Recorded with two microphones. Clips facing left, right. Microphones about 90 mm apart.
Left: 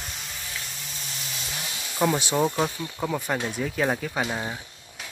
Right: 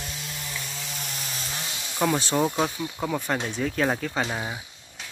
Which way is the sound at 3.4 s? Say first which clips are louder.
Even; 10° left (ahead or behind).